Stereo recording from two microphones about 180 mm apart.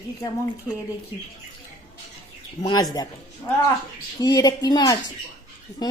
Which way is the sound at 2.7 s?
20° left (ahead or behind).